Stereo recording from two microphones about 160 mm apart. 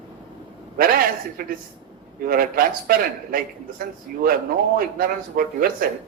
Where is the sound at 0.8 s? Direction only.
65° right (ahead or behind).